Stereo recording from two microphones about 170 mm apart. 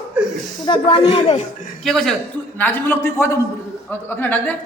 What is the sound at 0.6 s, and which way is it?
Speech, 30° left (ahead or behind).